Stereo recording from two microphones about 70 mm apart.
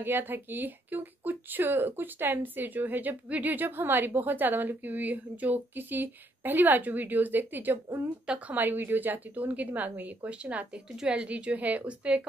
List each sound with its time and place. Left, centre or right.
0.0 s a woman's voice: right